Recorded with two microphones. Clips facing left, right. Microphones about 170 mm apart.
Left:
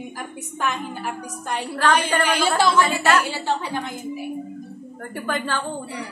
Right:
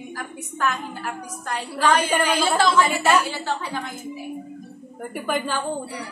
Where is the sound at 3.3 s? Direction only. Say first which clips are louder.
Left 2 dB; 20° left (ahead or behind).